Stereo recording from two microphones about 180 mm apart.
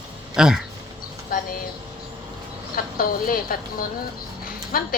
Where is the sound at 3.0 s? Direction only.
55° left (ahead or behind).